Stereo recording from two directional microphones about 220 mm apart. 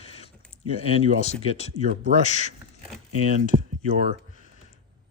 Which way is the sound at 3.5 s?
25° right (ahead or behind).